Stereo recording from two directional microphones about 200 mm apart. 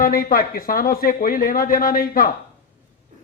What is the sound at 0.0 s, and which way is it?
A man's voice, 45° left (ahead or behind).